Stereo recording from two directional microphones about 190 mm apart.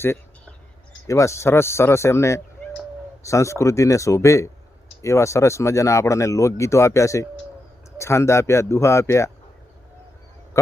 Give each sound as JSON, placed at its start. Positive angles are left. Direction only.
{"t": 1.0, "sound": "speech", "side_deg": 15}